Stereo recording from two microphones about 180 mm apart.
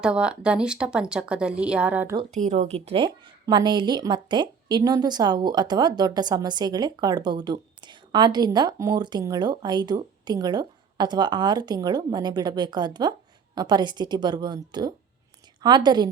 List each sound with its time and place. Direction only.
0.0 s speech: 5° right (ahead or behind)
2.3 s a woman's voice: 45° right (ahead or behind); by 16.0 s 25° right (ahead or behind)